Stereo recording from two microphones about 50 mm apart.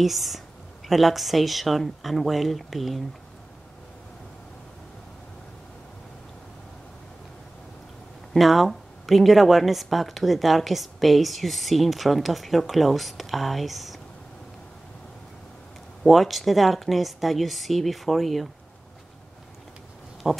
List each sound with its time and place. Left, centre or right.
0.0 s speech: centre
8.3 s speech: centre
16.0 s speech: centre
20.2 s speech: centre